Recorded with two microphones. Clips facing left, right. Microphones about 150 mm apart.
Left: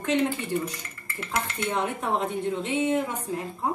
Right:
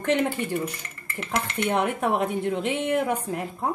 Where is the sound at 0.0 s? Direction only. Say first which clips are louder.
Right 1 dB; 60° right (ahead or behind).